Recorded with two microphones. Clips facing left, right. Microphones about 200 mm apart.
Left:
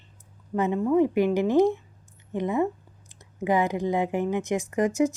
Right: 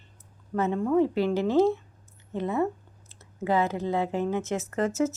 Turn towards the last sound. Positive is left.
turn(degrees=15)  # may be behind; listen again after turning